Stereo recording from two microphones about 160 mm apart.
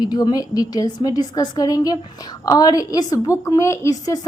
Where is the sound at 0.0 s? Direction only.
25° left (ahead or behind).